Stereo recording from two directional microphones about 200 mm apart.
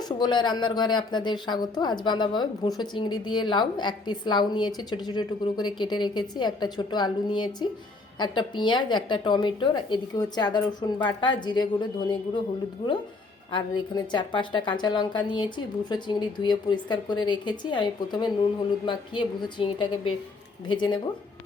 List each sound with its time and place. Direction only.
0.2 s speech: 20° left (ahead or behind)
13.5 s speech: 25° left (ahead or behind)